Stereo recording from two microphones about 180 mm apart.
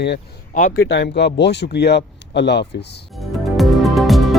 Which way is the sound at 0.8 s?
70° left (ahead or behind).